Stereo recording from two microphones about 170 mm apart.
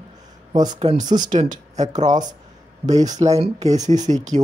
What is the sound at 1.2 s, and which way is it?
Speech, 50° right (ahead or behind).